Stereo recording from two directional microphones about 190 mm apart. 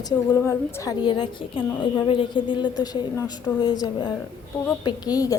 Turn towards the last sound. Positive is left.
turn(degrees=20)  # may be behind; listen again after turning